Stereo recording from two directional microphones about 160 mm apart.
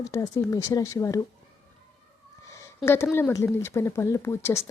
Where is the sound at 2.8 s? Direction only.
15° left (ahead or behind).